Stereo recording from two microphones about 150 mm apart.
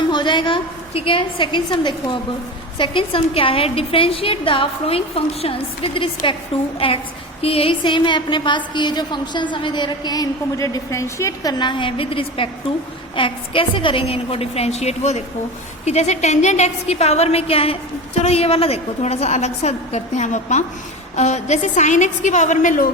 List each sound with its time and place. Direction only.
0.1 s a woman's voice: 30° left (ahead or behind); by 22.9 s 60° left (ahead or behind)